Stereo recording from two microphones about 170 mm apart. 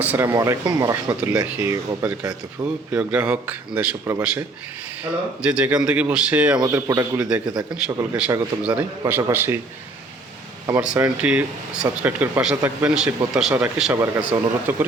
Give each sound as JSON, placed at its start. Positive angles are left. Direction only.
{"t": 0.0, "sound": "a man's voice", "side_deg": -10}
{"t": 1.3, "sound": "a man's voice", "side_deg": -10}
{"t": 2.6, "sound": "a man's voice", "side_deg": -5}
{"t": 5.4, "sound": "a man's voice", "side_deg": -5}
{"t": 7.2, "sound": "a man's voice", "side_deg": -5}
{"t": 7.5, "sound": "a man's voice", "side_deg": -20}
{"t": 10.9, "sound": "a man's voice", "side_deg": -10}